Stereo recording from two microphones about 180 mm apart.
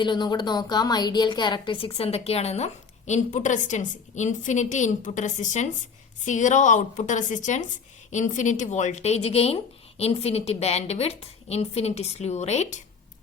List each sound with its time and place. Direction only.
0.0 s a woman's voice: 25° left (ahead or behind)